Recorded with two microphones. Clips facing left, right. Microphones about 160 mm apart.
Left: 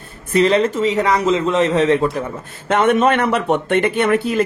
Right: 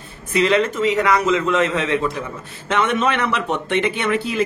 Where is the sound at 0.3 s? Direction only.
40° left (ahead or behind).